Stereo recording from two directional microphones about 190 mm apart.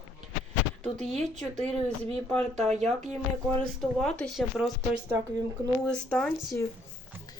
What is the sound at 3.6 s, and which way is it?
Speech, 5° left (ahead or behind).